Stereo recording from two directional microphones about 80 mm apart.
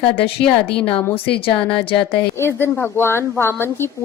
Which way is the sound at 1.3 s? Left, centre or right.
Left.